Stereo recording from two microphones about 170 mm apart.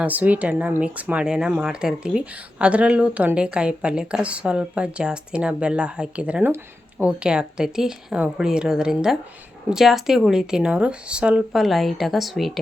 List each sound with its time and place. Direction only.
0.0 s speech: 10° right (ahead or behind)